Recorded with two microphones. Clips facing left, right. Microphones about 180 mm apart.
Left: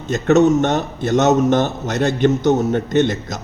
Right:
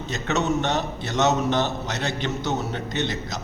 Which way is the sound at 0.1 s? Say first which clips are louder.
Left 11 dB; 50° left (ahead or behind).